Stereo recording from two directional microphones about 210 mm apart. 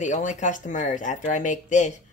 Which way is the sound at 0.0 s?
35° left (ahead or behind).